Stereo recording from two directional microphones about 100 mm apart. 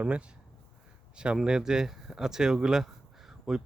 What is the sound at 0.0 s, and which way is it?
Speech, 10° right (ahead or behind).